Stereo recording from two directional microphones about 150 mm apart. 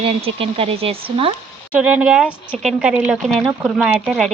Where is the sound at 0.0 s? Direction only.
40° right (ahead or behind).